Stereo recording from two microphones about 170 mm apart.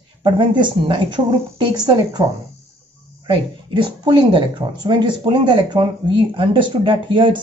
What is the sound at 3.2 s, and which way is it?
Speech, 30° right (ahead or behind).